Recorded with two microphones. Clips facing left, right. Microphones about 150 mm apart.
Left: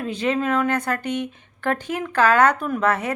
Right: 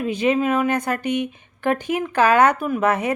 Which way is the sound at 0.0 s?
15° right (ahead or behind).